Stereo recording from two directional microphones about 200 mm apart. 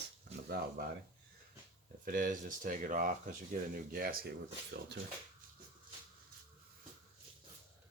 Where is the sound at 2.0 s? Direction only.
45° right (ahead or behind).